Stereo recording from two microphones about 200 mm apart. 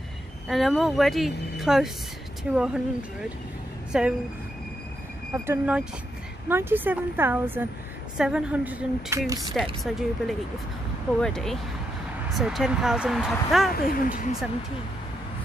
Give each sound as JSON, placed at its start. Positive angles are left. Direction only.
{"t": 0.5, "sound": "a woman's voice", "side_deg": 0}
{"t": 5.3, "sound": "a woman's voice", "side_deg": -10}
{"t": 13.7, "sound": "speech", "side_deg": 50}